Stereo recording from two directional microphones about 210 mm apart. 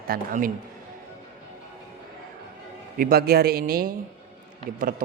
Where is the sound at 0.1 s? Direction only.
40° right (ahead or behind).